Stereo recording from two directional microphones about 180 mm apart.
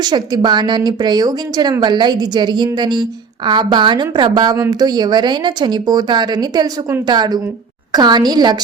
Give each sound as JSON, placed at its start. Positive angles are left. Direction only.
{"t": 0.0, "sound": "a woman's voice", "side_deg": -25}